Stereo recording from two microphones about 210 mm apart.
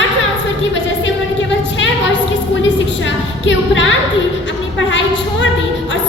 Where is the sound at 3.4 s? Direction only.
60° left (ahead or behind).